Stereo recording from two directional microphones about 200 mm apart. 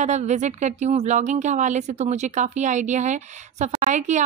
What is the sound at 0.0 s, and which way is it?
A woman's voice, 35° right (ahead or behind).